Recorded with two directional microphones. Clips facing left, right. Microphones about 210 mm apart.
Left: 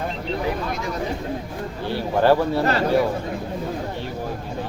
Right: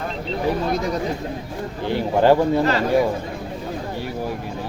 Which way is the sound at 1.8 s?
15° right (ahead or behind).